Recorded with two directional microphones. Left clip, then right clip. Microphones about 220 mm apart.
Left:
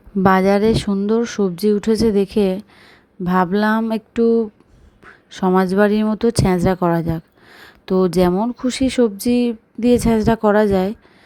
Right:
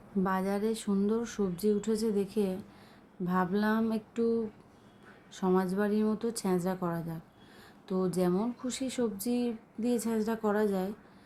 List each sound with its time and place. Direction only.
0.2 s speech: 40° left (ahead or behind)